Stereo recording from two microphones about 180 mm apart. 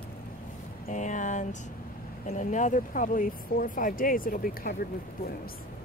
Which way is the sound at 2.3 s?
45° left (ahead or behind).